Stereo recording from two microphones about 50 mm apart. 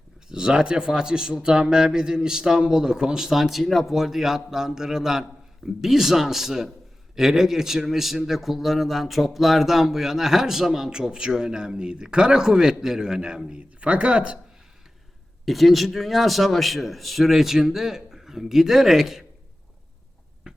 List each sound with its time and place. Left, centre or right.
0.3 s a man's voice: centre
15.4 s a man's voice: centre